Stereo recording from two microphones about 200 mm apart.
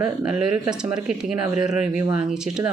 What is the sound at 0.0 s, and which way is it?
Speech, 5° right (ahead or behind).